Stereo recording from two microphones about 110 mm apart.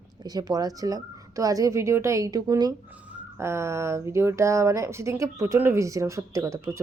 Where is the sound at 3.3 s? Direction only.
25° right (ahead or behind).